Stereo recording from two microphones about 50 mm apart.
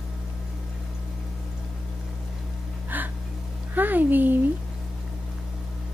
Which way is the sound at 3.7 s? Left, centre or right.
Right.